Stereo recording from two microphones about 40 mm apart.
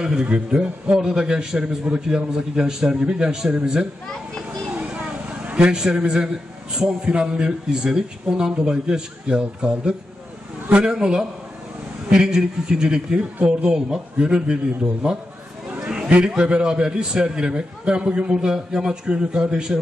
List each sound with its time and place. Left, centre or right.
0.0 s a man's voice: centre
4.8 s vehicle: right
5.8 s a man's voice: centre
13.4 s speech: right
13.7 s a man's voice: right
15.8 s a sound: right
16.3 s a man's voice: right